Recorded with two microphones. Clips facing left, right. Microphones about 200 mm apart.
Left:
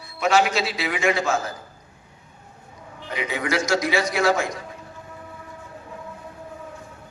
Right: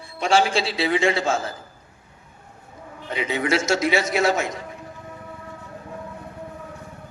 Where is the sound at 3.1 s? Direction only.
25° right (ahead or behind).